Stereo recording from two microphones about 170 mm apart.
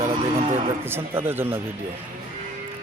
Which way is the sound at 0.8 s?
15° right (ahead or behind).